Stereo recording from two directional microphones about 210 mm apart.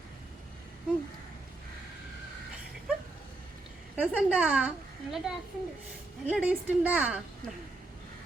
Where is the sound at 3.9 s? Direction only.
5° right (ahead or behind).